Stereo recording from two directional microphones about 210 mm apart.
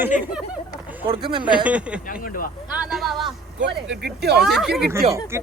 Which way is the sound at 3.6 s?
55° right (ahead or behind).